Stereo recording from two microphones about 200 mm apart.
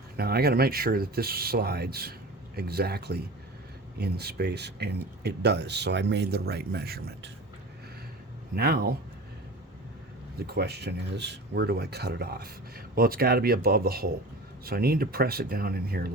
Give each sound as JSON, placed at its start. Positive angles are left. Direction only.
{"t": 0.2, "sound": "speech", "side_deg": -50}
{"t": 8.5, "sound": "speech", "side_deg": -50}
{"t": 10.4, "sound": "speech", "side_deg": -55}